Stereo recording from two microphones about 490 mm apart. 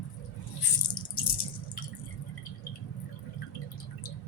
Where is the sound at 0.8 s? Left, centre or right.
Left.